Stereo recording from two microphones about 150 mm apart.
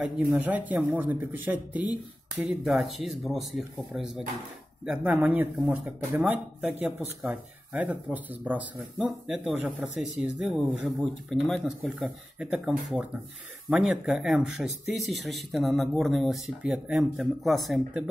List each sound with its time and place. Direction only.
0.0 s speech: 10° right (ahead or behind)